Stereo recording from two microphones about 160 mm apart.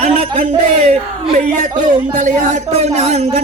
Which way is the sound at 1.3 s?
50° right (ahead or behind).